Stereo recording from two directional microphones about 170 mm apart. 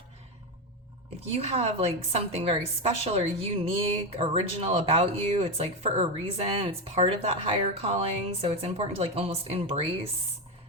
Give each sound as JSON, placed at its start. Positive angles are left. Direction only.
{"t": 1.3, "sound": "a woman's voice", "side_deg": -35}